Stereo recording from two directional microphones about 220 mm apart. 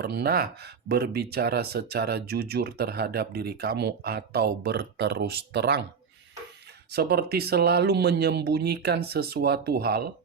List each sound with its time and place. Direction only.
0.0 s speech: 45° right (ahead or behind)
6.9 s speech: 45° right (ahead or behind)